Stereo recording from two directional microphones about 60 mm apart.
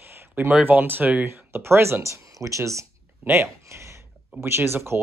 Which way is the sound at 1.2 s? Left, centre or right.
Right.